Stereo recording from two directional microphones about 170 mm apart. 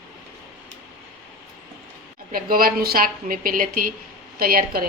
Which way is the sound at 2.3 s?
55° right (ahead or behind).